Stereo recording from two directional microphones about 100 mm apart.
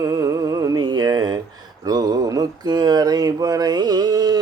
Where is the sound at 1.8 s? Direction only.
40° right (ahead or behind).